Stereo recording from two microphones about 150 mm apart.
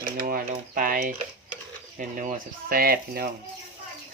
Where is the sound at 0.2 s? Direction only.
70° right (ahead or behind).